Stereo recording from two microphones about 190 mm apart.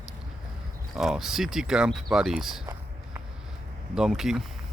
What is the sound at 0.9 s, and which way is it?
Speech, centre (ahead or behind).